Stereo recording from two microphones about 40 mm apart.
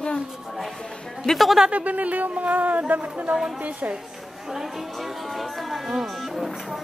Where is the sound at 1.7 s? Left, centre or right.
Right.